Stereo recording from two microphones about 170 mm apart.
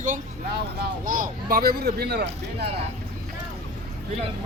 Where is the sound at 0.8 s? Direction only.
55° right (ahead or behind); by 2.6 s 75° right (ahead or behind).